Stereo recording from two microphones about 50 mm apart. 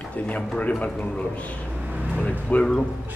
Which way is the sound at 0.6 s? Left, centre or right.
Left.